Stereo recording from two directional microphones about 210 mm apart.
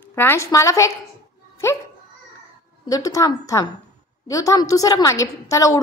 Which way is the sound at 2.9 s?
15° left (ahead or behind).